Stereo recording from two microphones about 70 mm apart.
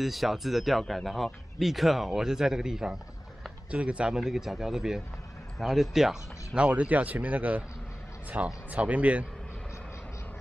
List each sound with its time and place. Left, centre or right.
0.0 s a man's voice: centre; by 7.6 s right
8.6 s speech: right